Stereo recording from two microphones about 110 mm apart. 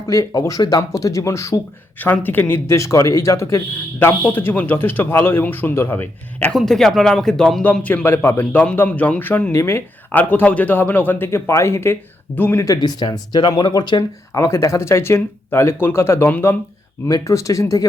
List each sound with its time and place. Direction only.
0.1 s speech: 30° left (ahead or behind)
2.0 s speech: 15° left (ahead or behind)
6.5 s speech: 5° left (ahead or behind); by 12.6 s 20° left (ahead or behind)
12.6 s speech: 35° left (ahead or behind)
14.3 s speech: 30° left (ahead or behind)
17.1 s speech: 30° left (ahead or behind)